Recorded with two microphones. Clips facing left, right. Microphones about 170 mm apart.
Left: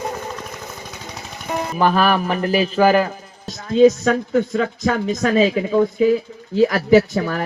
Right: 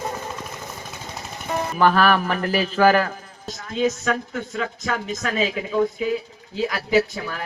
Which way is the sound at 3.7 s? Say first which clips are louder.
Left 9 dB; 35° left (ahead or behind).